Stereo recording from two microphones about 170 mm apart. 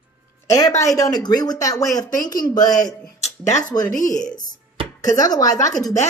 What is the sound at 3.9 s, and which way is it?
Speech, 50° left (ahead or behind).